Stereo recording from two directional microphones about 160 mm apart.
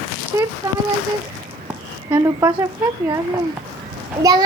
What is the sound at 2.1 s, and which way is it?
Child singing, 20° right (ahead or behind).